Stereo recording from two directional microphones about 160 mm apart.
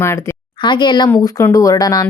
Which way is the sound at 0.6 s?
30° left (ahead or behind).